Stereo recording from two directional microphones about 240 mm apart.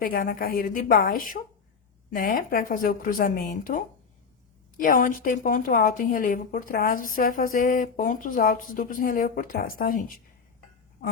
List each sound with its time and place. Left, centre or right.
0.0 s speech: left